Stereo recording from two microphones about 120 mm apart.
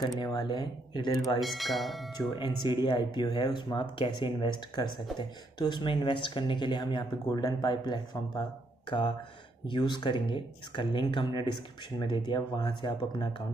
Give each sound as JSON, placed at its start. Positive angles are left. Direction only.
{"t": 0.0, "sound": "speech", "side_deg": 40}
{"t": 1.4, "sound": "speech", "side_deg": 0}
{"t": 2.3, "sound": "speech", "side_deg": 40}
{"t": 9.7, "sound": "speech", "side_deg": 40}